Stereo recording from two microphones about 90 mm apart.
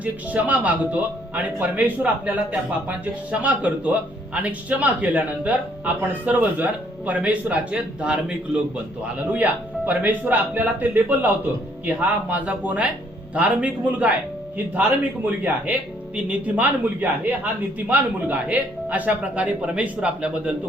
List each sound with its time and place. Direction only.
0.0 s speech: 15° right (ahead or behind)
9.3 s speech: 20° right (ahead or behind)
12.3 s speech: 15° right (ahead or behind)